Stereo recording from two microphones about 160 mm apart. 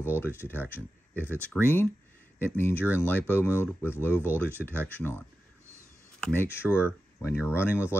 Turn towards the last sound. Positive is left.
turn(degrees=15)  # may be behind; listen again after turning